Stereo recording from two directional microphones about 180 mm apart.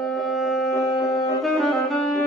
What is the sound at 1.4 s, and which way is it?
Saxophone, centre (ahead or behind).